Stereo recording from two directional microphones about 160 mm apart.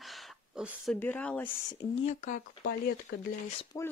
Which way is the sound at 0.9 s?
10° left (ahead or behind).